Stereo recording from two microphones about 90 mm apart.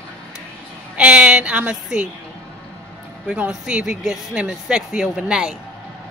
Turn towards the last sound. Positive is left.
turn(degrees=-5)  # may be behind; listen again after turning